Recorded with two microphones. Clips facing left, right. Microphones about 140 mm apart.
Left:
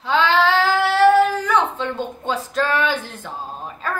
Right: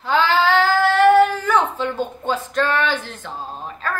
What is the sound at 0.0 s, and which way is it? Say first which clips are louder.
Child singing: even; centre (ahead or behind).